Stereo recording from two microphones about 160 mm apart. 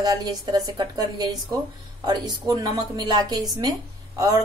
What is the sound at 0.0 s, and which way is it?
A woman's voice, 25° right (ahead or behind).